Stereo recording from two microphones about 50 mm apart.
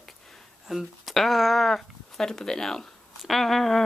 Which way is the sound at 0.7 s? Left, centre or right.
Centre.